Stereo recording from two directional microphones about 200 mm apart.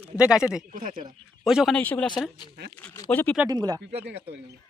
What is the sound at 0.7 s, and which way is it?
Speech, 45° right (ahead or behind).